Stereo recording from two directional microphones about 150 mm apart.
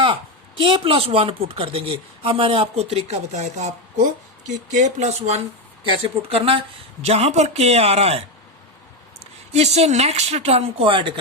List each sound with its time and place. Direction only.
0.0 s speech: 35° right (ahead or behind)
9.5 s speech: 45° right (ahead or behind)